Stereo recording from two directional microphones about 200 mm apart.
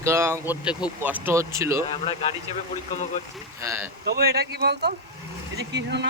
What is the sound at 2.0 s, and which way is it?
Speech, 25° left (ahead or behind).